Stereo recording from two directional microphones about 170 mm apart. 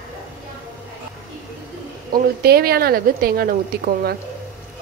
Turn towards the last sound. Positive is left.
turn(degrees=-65)  # may be behind; listen again after turning